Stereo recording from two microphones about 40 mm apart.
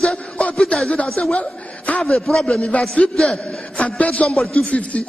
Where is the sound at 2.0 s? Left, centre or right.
Centre.